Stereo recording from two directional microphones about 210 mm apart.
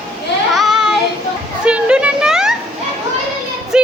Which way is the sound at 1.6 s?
5° right (ahead or behind).